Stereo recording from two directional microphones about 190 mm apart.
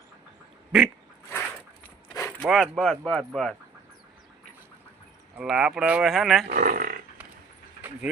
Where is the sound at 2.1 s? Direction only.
10° left (ahead or behind).